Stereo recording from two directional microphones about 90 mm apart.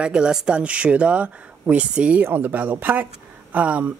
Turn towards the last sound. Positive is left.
turn(degrees=-15)  # may be behind; listen again after turning